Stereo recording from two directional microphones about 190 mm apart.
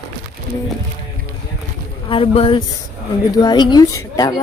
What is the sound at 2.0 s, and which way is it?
A woman's voice, 30° left (ahead or behind).